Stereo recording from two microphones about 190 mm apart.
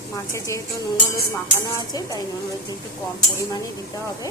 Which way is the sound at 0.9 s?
45° left (ahead or behind).